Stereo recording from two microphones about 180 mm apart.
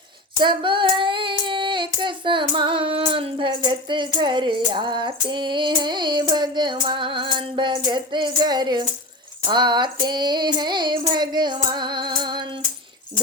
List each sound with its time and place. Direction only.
0.3 s child singing: 25° right (ahead or behind)
7.9 s speech: 25° right (ahead or behind)
9.5 s child singing: 25° right (ahead or behind)